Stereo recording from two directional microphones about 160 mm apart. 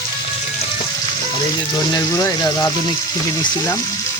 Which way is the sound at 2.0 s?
20° left (ahead or behind).